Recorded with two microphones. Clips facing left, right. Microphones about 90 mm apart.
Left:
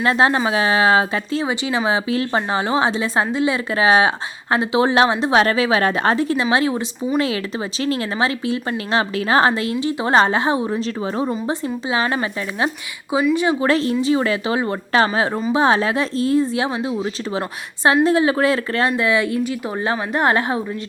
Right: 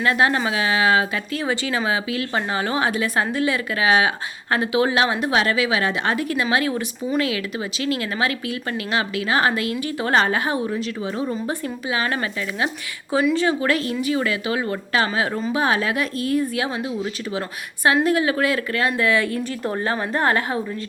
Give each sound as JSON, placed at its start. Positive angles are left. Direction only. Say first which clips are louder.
{"t": 0.0, "sound": "speech", "louder": "left 3 dB", "side_deg": 30}
{"t": 5.4, "sound": "speech", "louder": "left 4 dB", "side_deg": 35}
{"t": 11.3, "sound": "a woman's voice", "louder": "left 3 dB", "side_deg": 25}
{"t": 13.6, "sound": "speech", "louder": "left 4 dB", "side_deg": 30}
{"t": 18.9, "sound": "a woman's voice", "louder": "left 2 dB", "side_deg": 20}